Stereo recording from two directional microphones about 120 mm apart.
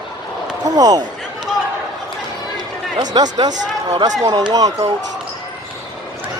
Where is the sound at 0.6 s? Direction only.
35° right (ahead or behind).